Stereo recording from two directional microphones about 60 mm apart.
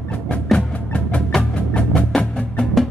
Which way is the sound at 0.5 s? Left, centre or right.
Left.